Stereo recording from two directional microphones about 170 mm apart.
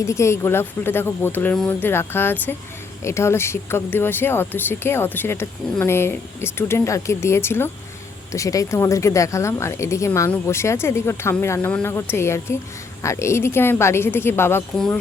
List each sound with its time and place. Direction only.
0.0 s speech: 15° left (ahead or behind)